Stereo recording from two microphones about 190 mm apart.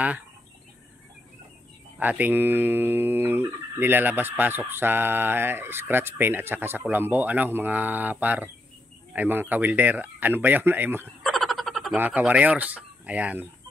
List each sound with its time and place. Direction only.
2.0 s speech: 10° right (ahead or behind)
11.2 s speech: centre (ahead or behind)